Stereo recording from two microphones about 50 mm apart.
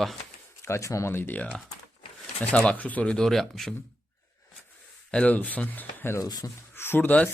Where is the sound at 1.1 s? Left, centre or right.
Left.